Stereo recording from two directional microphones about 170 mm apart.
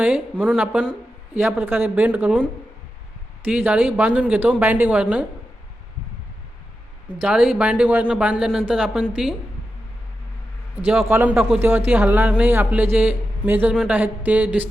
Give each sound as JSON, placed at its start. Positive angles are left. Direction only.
{"t": 0.0, "sound": "a woman's voice", "side_deg": -5}
{"t": 3.5, "sound": "a woman's voice", "side_deg": -10}
{"t": 7.2, "sound": "speech", "side_deg": -5}
{"t": 10.8, "sound": "a woman's voice", "side_deg": -10}